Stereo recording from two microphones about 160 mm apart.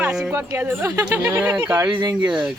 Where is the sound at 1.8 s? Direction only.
30° right (ahead or behind).